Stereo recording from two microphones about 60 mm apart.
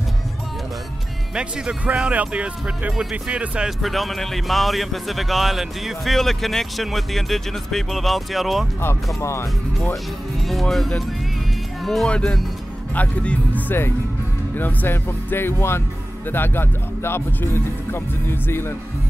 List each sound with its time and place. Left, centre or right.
1.3 s speech: centre
3.8 s a man's voice: centre
8.8 s speech: left
10.4 s a man's voice: centre
12.1 s speech: centre
12.9 s speech: left